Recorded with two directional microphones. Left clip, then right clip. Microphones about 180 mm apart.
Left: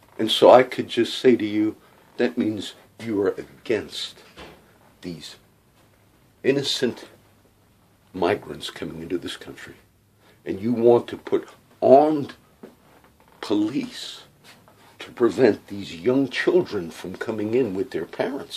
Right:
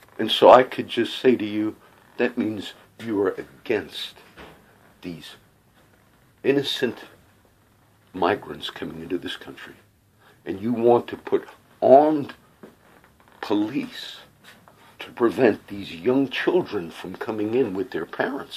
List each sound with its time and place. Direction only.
0.2 s speech: 10° left (ahead or behind)
6.4 s speech: 15° left (ahead or behind)
8.1 s speech: 15° left (ahead or behind)
13.4 s speech: 15° left (ahead or behind)